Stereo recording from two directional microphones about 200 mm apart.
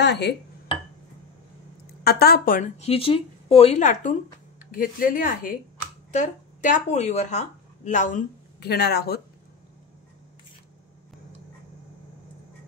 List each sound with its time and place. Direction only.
0.0 s speech: 55° left (ahead or behind)
2.0 s a woman's voice: 50° left (ahead or behind)
8.5 s speech: 55° left (ahead or behind)